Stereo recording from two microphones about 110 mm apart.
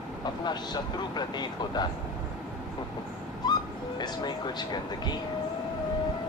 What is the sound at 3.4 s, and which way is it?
Speech, 40° left (ahead or behind).